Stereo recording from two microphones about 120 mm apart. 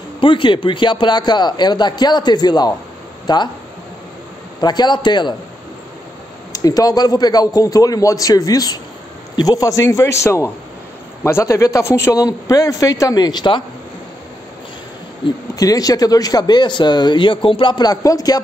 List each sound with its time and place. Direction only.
0.2 s speech: 45° left (ahead or behind)
4.6 s speech: 35° left (ahead or behind)
6.5 s a man's voice: 30° left (ahead or behind)
15.5 s speech: 30° left (ahead or behind)